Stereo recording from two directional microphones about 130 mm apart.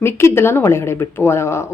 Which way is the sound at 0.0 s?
20° left (ahead or behind).